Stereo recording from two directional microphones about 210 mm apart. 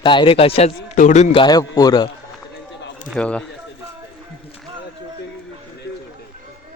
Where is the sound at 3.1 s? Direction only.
5° left (ahead or behind).